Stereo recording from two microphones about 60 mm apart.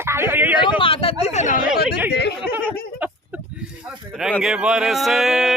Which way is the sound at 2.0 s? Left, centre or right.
Right.